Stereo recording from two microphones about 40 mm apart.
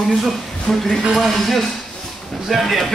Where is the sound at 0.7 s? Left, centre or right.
Centre.